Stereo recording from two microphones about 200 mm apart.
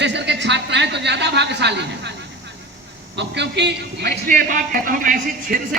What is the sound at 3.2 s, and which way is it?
A man's voice, 60° right (ahead or behind).